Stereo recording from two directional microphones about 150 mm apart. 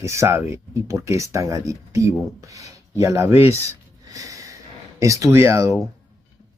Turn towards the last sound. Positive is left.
turn(degrees=-20)  # may be behind; listen again after turning